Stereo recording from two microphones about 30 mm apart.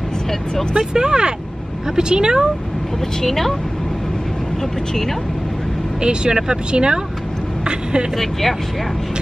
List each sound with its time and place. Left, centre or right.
0.7 s speech: right
3.3 s speech: centre
5.9 s speech: right
8.2 s speech: centre